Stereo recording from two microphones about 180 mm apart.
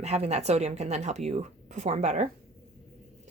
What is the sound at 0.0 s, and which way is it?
Speech, 35° right (ahead or behind).